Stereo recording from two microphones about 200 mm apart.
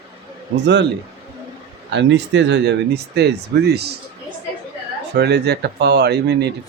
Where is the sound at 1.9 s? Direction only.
65° right (ahead or behind).